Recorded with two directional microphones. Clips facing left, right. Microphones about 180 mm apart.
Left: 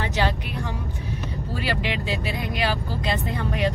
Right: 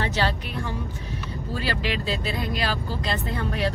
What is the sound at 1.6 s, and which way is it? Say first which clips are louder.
Speech: left 1 dB; 15° left (ahead or behind).